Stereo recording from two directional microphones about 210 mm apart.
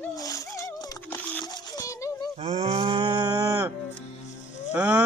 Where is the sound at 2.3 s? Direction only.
25° right (ahead or behind).